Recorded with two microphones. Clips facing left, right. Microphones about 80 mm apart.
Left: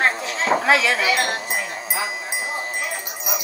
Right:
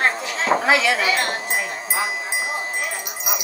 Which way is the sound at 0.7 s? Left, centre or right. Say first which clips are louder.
Even; centre.